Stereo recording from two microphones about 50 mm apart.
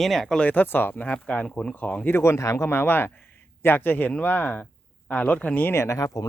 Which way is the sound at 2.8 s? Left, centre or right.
Left.